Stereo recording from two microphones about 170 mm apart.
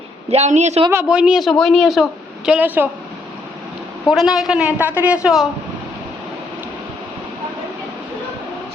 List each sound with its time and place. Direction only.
0.3 s a woman's voice: 40° right (ahead or behind)
0.9 s a woman's voice: 10° right (ahead or behind)
4.1 s a woman's voice: centre (ahead or behind)